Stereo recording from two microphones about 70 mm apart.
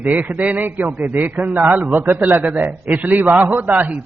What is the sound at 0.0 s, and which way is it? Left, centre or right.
Speech, right.